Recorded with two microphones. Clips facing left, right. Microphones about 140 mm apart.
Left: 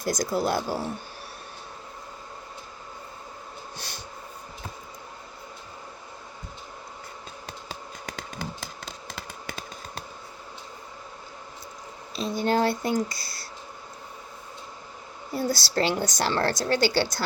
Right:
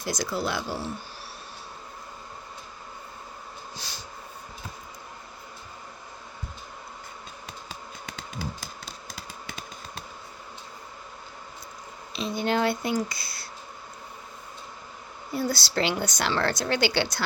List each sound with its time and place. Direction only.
0.0 s speech: 45° left (ahead or behind)
3.8 s snort: 60° left (ahead or behind)
12.1 s speech: 40° left (ahead or behind)
15.3 s speech: 40° left (ahead or behind)